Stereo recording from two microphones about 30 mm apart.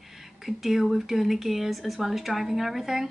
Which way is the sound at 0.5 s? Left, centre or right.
Centre.